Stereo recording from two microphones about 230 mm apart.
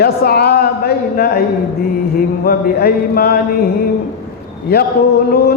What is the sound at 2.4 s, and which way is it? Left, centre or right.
Speech, left.